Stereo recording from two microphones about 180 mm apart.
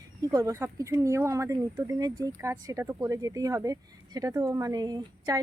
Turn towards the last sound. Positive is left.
turn(degrees=-20)  # may be behind; listen again after turning